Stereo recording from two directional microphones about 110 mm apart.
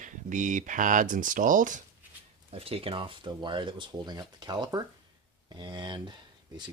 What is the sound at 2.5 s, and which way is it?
Speech, 60° right (ahead or behind).